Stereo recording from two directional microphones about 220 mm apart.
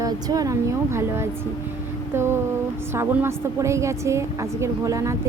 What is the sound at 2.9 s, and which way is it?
A woman's voice, 10° right (ahead or behind).